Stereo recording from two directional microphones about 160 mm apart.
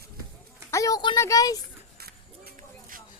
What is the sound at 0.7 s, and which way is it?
Speech, 20° left (ahead or behind).